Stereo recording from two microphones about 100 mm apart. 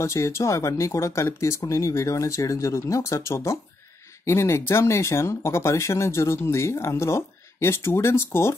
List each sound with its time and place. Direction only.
0.0 s speech: 30° left (ahead or behind)